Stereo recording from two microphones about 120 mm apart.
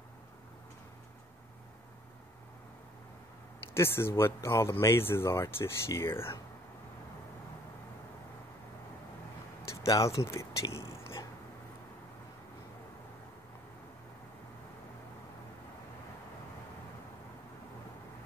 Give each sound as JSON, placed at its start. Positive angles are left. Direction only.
{"t": 3.7, "sound": "speech", "side_deg": 20}
{"t": 9.7, "sound": "speech", "side_deg": 25}